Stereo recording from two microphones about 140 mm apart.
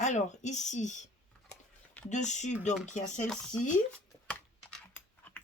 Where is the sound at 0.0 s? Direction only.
60° left (ahead or behind).